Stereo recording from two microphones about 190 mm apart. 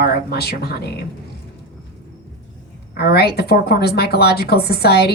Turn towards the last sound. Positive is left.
turn(degrees=55)  # may be behind; listen again after turning